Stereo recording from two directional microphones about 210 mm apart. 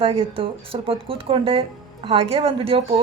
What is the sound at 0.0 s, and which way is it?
A woman's voice, 25° right (ahead or behind).